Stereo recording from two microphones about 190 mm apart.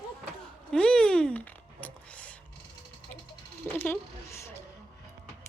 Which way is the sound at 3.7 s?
10° left (ahead or behind).